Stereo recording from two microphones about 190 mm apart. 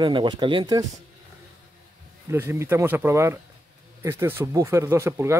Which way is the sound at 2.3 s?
15° right (ahead or behind).